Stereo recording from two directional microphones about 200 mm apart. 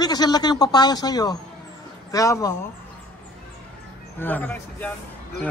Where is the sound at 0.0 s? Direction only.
20° left (ahead or behind).